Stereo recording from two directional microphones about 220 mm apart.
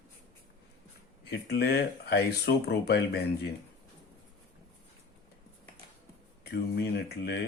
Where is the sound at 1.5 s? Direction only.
45° left (ahead or behind).